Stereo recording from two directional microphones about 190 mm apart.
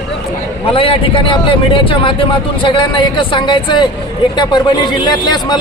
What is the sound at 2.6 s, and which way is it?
Speech, 25° left (ahead or behind).